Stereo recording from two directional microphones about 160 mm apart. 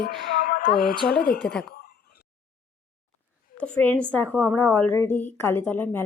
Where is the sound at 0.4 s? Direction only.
60° left (ahead or behind).